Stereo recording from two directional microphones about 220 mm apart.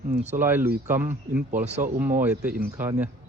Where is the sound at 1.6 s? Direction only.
30° right (ahead or behind).